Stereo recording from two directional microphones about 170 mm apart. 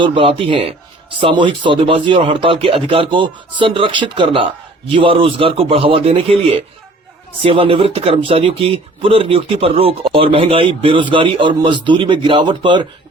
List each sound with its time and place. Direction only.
0.0 s speech: 35° right (ahead or behind)
7.4 s speech: 30° right (ahead or behind)